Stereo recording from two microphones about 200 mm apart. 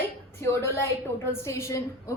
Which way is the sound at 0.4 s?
15° left (ahead or behind).